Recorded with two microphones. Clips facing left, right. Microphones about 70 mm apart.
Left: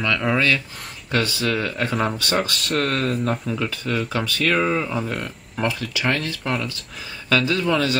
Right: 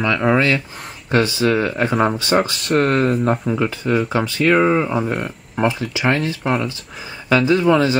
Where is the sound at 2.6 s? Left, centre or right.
Centre.